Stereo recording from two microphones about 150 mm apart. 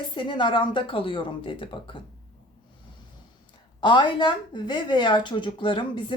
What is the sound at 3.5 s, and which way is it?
Speech, 30° left (ahead or behind).